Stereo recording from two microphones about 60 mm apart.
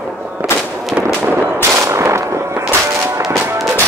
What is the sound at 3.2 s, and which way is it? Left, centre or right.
Music, right.